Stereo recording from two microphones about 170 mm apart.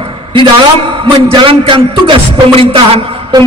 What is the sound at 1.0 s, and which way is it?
A man's voice, 30° right (ahead or behind).